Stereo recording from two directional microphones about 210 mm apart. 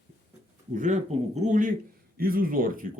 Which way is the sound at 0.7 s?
35° right (ahead or behind).